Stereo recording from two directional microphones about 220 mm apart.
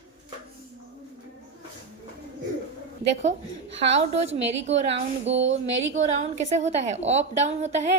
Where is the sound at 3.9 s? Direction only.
30° right (ahead or behind).